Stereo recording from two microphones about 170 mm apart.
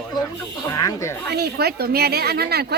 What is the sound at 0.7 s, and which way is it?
Speech, 20° left (ahead or behind).